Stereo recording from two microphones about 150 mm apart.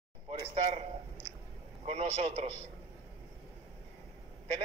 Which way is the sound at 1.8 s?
45° right (ahead or behind).